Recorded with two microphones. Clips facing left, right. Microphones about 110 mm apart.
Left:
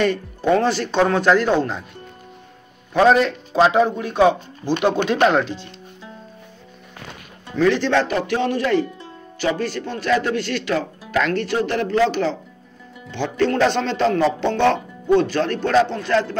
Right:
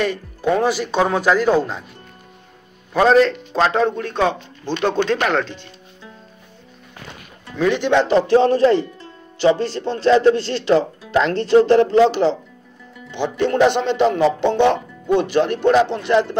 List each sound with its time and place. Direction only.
0.0 s speech: 5° right (ahead or behind)
2.9 s a man's voice: centre (ahead or behind)
7.5 s speech: 15° right (ahead or behind)